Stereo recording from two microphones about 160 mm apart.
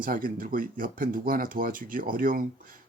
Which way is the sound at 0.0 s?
60° right (ahead or behind).